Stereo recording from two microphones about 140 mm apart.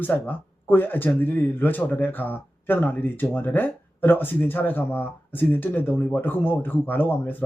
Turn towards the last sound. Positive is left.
turn(degrees=15)  # may be behind; listen again after turning